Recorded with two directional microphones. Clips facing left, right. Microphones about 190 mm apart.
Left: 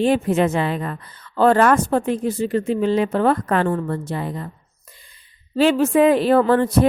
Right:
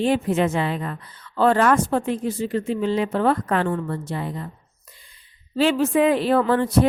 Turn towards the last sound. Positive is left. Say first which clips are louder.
# left 3 dB
turn(degrees=45)  # may be behind; listen again after turning